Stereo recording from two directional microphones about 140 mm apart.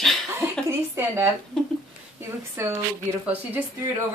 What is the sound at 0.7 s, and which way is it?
Speech, 15° right (ahead or behind).